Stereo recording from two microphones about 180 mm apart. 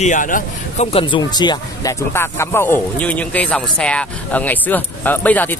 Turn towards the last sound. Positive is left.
turn(degrees=10)  # may be behind; listen again after turning